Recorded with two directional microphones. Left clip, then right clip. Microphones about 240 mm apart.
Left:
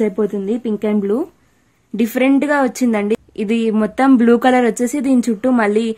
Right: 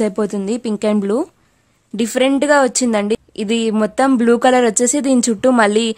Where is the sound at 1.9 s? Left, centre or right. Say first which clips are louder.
Even; right.